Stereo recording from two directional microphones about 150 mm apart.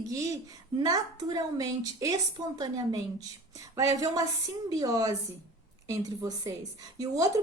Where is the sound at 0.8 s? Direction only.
25° right (ahead or behind).